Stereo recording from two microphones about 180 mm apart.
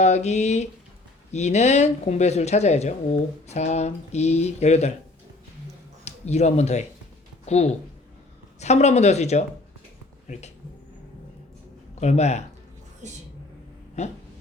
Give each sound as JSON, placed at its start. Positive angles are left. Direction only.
{"t": 0.0, "sound": "speech", "side_deg": 40}
{"t": 6.1, "sound": "speech", "side_deg": 40}
{"t": 11.9, "sound": "speech", "side_deg": 35}
{"t": 13.0, "sound": "a woman's voice", "side_deg": -40}
{"t": 14.0, "sound": "speech", "side_deg": 40}